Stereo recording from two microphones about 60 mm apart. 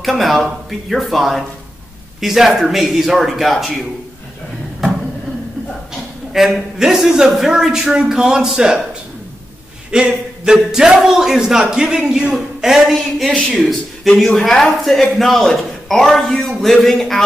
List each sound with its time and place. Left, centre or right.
0.2 s a man's voice: centre
6.3 s a man's voice: centre
9.8 s a man's voice: centre